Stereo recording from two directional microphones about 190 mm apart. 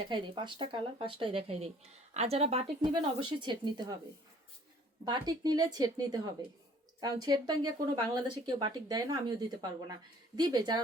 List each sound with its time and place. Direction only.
0.0 s speech: 25° right (ahead or behind)
5.0 s speech: 20° right (ahead or behind)